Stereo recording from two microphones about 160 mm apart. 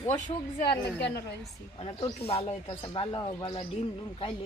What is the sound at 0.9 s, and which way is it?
Speech, 90° left.